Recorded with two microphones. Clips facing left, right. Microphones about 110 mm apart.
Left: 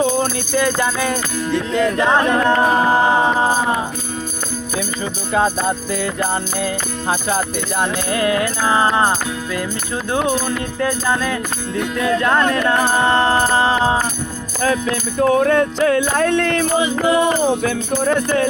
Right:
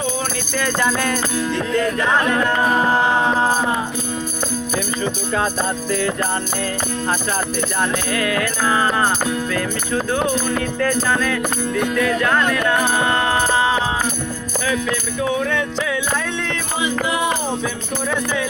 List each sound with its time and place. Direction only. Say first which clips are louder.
0.5 s music: left 1 dB; 15° left (ahead or behind)
2.0 s music: left 3 dB; 30° left (ahead or behind)
2.7 s music: left 2 dB; 15° left (ahead or behind)
5.3 s music: left 6 dB; 15° left (ahead or behind)
8.1 s music: left 3 dB; 25° left (ahead or behind)
15.2 s music: left 8 dB; 45° left (ahead or behind)